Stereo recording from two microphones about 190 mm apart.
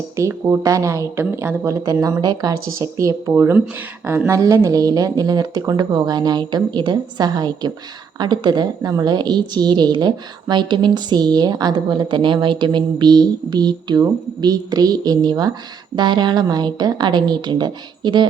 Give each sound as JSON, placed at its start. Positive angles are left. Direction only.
{"t": 0.2, "sound": "a woman's voice", "side_deg": -15}